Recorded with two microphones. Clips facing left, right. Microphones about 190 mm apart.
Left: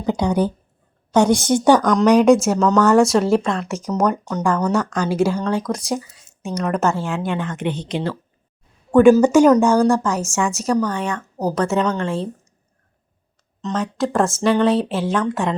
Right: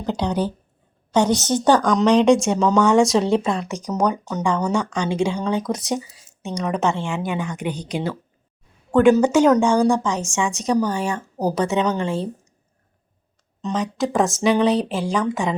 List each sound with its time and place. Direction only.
0.0 s a woman's voice: 10° left (ahead or behind); by 8.2 s 10° right (ahead or behind)
8.9 s a woman's voice: 10° left (ahead or behind)
10.8 s speech: 5° right (ahead or behind)
11.1 s speech: 30° right (ahead or behind)
11.5 s speech: centre (ahead or behind)
13.7 s speech: centre (ahead or behind)